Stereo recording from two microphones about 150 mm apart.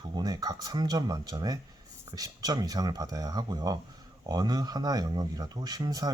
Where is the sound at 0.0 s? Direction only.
30° right (ahead or behind).